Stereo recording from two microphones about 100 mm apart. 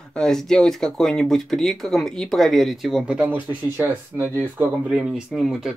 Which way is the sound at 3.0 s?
15° right (ahead or behind).